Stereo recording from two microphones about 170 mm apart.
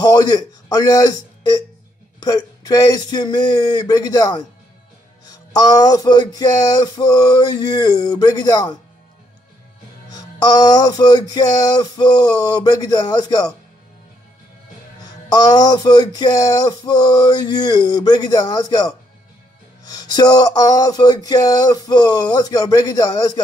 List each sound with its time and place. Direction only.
0.0 s a man's voice: 25° left (ahead or behind)
2.2 s music: 25° left (ahead or behind)
10.1 s music: 25° left (ahead or behind)
15.0 s music: 20° left (ahead or behind)